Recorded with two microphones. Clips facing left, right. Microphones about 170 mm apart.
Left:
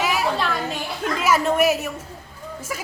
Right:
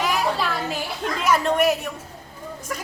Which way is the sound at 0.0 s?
5° left (ahead or behind).